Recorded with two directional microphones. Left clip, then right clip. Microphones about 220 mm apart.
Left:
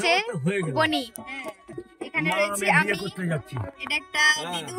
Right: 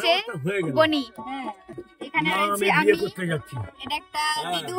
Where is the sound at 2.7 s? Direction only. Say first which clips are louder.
Right 3 dB; 15° right (ahead or behind).